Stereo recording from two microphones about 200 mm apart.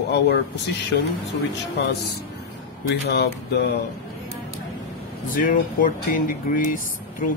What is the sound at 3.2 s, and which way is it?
Mantra, 55° left (ahead or behind).